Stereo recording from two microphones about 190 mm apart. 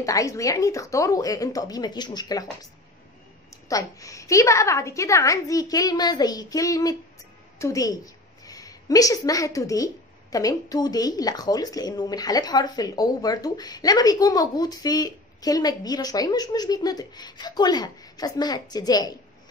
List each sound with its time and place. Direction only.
0.0 s a woman's voice: 15° left (ahead or behind)
3.4 s a woman's voice: 20° left (ahead or behind)